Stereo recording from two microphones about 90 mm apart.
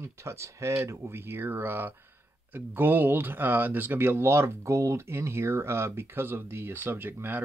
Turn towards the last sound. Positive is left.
turn(degrees=-25)  # may be behind; listen again after turning